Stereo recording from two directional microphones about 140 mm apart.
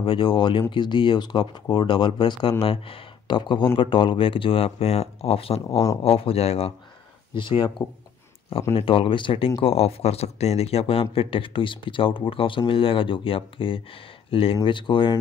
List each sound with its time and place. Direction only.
0.0 s speech: 40° left (ahead or behind)
8.7 s speech: 40° left (ahead or behind)